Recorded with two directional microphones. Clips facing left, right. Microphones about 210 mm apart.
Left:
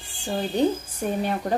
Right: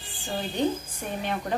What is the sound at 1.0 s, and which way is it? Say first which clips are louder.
Speech: left 6 dB; 35° left (ahead or behind).